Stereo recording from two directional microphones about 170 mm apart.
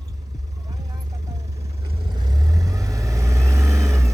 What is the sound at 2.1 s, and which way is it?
Vehicle, 25° right (ahead or behind).